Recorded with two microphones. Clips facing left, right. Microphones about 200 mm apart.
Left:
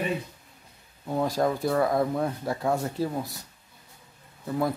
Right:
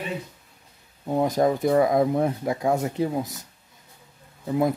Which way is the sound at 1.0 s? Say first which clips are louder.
Right 4 dB; 20° right (ahead or behind).